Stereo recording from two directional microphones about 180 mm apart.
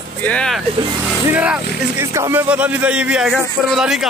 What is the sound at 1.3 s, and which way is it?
Speech, 5° right (ahead or behind).